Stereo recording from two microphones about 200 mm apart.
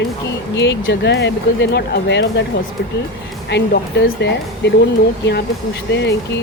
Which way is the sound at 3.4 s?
60° left (ahead or behind).